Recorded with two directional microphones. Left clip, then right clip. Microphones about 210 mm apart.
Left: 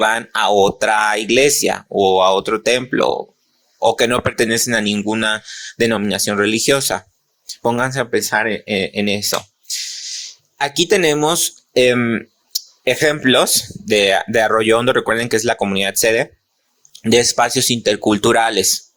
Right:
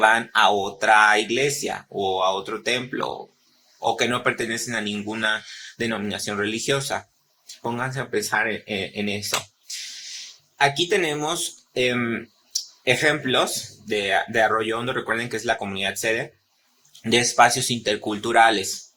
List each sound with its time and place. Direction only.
0.0 s speech: 50° left (ahead or behind)